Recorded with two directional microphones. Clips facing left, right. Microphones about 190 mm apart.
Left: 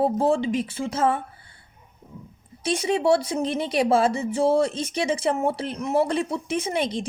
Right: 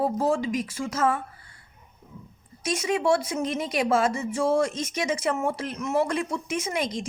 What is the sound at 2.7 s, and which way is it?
Speech, 30° left (ahead or behind).